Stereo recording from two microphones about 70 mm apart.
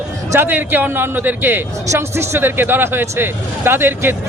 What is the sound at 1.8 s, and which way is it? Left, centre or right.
Speech, right.